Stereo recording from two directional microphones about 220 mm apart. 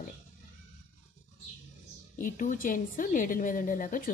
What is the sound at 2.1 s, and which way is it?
A woman's voice, 40° left (ahead or behind).